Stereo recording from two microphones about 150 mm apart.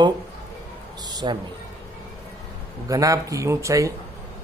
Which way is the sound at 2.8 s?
20° right (ahead or behind).